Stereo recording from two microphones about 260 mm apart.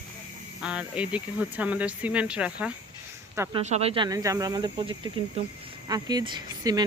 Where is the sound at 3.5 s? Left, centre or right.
Right.